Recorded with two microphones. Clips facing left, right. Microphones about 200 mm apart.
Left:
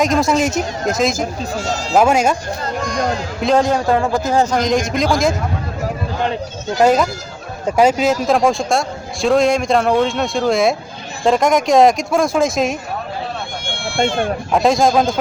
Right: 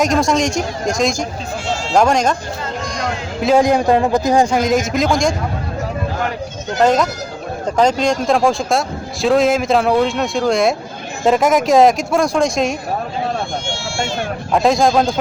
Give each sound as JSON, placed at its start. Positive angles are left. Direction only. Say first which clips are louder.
{"t": 0.0, "sound": "speech", "louder": "even", "side_deg": 0}
{"t": 3.4, "sound": "a man's voice", "louder": "right 2 dB", "side_deg": -10}
{"t": 6.8, "sound": "speech", "louder": "left 1 dB", "side_deg": 5}
{"t": 13.9, "sound": "speech", "louder": "left 6 dB", "side_deg": 55}
{"t": 14.5, "sound": "speech", "louder": "right 1 dB", "side_deg": 0}